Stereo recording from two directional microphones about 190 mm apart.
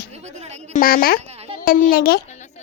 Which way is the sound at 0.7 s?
45° left (ahead or behind).